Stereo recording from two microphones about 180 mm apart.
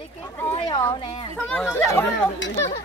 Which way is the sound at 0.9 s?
30° left (ahead or behind).